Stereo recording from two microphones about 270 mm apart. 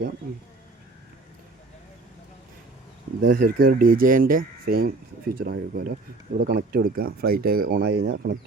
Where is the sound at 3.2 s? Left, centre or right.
Right.